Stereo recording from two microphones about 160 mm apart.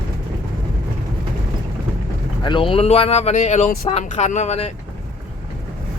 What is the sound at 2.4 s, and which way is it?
Speech, 30° left (ahead or behind).